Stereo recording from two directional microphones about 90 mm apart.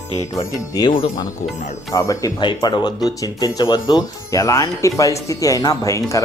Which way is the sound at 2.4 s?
55° left (ahead or behind).